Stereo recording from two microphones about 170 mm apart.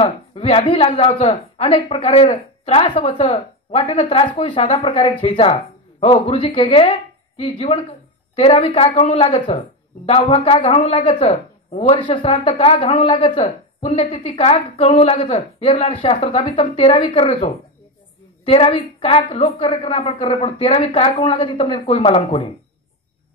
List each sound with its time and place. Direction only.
0.0 s speech: 35° left (ahead or behind)